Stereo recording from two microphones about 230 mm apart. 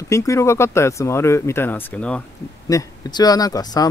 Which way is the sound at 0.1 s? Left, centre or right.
Centre.